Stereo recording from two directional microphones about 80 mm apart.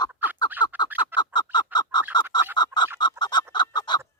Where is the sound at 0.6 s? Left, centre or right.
Left.